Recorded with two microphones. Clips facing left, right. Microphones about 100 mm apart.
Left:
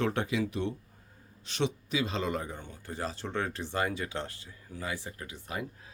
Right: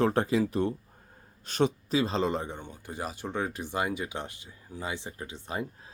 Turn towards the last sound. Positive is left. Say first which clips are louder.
# right 3 dB
turn(degrees=-25)  # may be behind; listen again after turning